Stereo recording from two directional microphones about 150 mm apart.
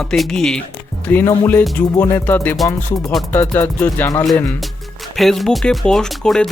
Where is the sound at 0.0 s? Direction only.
5° left (ahead or behind).